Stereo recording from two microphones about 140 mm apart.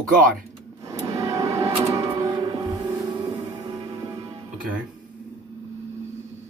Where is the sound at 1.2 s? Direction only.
25° right (ahead or behind).